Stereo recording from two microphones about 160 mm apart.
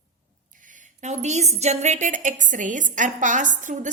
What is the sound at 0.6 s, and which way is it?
A woman's voice, 55° right (ahead or behind).